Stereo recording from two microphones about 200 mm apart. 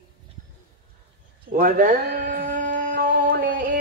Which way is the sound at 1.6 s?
45° right (ahead or behind).